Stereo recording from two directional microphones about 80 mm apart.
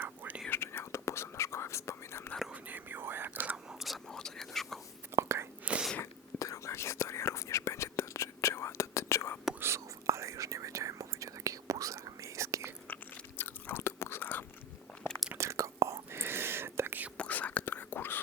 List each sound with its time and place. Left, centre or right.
0.0 s whispering: right
0.5 s whispering: left
2.5 s whispering: right
3.8 s whispering: centre
5.1 s whispering: right
5.7 s whispering: centre
6.0 s whispering: left
9.6 s whispering: right
13.4 s chewing: left
15.4 s whispering: right
17.2 s whispering: centre